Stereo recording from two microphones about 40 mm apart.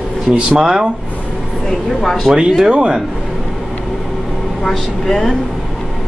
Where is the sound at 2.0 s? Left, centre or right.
Centre.